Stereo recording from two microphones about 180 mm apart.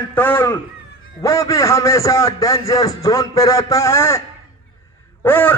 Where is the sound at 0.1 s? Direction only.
10° left (ahead or behind).